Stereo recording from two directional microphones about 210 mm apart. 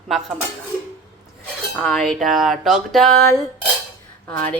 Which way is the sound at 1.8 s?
5° left (ahead or behind).